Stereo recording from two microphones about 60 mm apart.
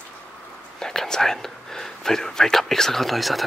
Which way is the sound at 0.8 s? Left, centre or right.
Centre.